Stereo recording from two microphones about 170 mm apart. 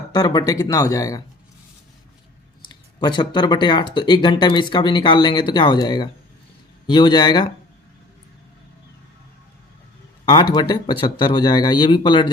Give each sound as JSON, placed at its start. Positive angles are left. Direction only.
{"t": 0.1, "sound": "speech", "side_deg": 20}
{"t": 2.6, "sound": "speech", "side_deg": 25}
{"t": 10.5, "sound": "speech", "side_deg": 25}